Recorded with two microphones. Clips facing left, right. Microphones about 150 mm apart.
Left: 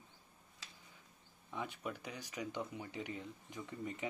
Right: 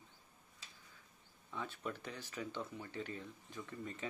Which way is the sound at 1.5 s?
15° left (ahead or behind).